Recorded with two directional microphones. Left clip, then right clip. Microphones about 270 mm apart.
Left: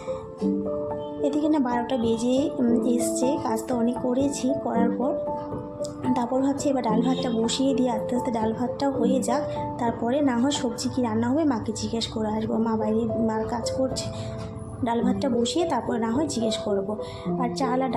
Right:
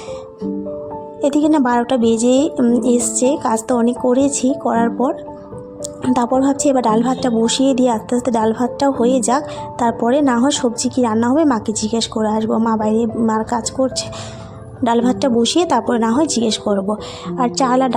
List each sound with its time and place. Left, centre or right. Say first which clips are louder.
1.2 s a woman's voice: right 10 dB; right